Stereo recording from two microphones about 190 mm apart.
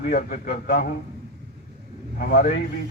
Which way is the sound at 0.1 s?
50° left (ahead or behind).